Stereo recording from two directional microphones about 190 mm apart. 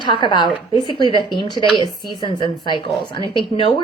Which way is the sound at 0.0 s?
25° left (ahead or behind).